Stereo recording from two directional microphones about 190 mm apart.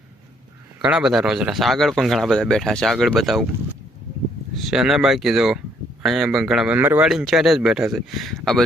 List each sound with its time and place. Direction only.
0.8 s speech: 5° right (ahead or behind)
4.7 s speech: centre (ahead or behind)